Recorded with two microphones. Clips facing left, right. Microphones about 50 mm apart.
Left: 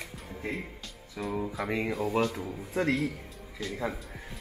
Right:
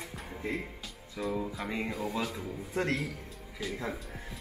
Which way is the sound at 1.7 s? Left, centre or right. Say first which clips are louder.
Left 4 dB; left.